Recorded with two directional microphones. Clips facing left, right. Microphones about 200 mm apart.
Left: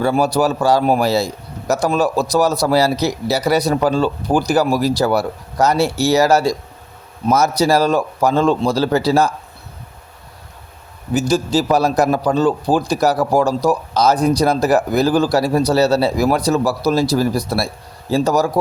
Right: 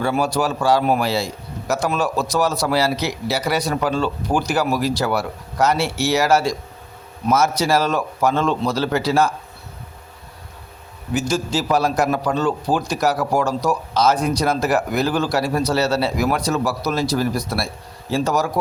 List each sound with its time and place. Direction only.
0.0 s a man's voice: 35° left (ahead or behind)
11.1 s a man's voice: 35° left (ahead or behind)